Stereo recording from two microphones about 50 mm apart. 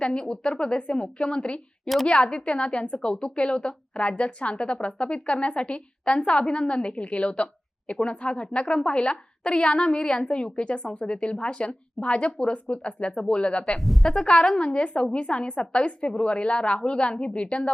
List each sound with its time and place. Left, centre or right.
0.0 s a woman's voice: centre
13.7 s a woman's voice: centre
14.1 s a woman's voice: centre